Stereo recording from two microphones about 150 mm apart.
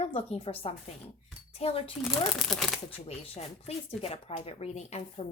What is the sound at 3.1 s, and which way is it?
Speech, 40° left (ahead or behind).